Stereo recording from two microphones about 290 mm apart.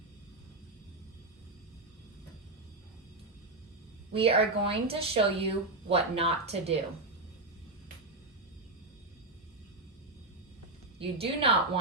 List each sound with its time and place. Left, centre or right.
4.1 s speech: centre
10.9 s speech: centre